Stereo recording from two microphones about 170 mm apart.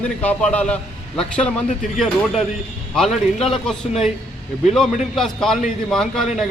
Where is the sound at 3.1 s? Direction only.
35° left (ahead or behind).